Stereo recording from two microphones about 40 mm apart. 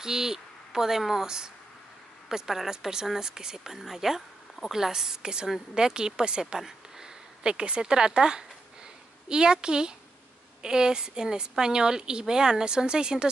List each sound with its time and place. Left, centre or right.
0.0 s speech: centre
7.4 s a woman's voice: right